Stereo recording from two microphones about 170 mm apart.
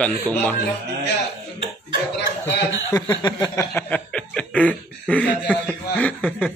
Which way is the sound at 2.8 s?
20° left (ahead or behind).